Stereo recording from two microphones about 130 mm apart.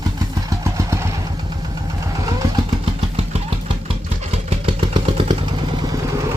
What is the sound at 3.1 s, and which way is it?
Vehicle, 50° right (ahead or behind).